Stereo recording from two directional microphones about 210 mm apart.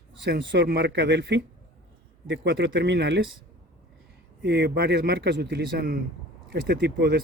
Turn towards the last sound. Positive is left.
turn(degrees=-50)  # may be behind; listen again after turning